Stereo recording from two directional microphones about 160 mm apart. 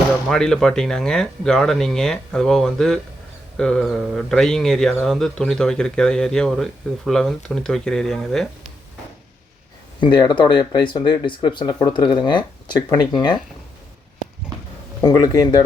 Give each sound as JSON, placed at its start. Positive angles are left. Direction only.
{"t": 0.3, "sound": "speech", "side_deg": 5}
{"t": 10.0, "sound": "speech", "side_deg": 30}
{"t": 15.0, "sound": "speech", "side_deg": 25}